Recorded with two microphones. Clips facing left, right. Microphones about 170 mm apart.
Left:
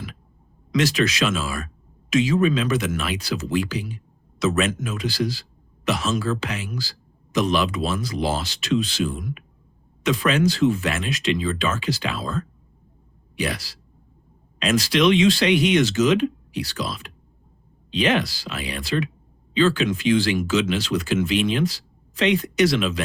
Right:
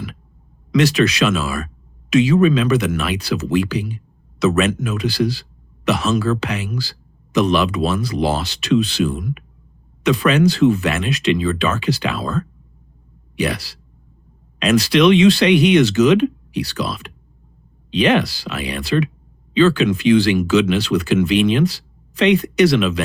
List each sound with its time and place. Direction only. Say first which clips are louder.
0.7 s speech: right 5 dB; 65° right (ahead or behind)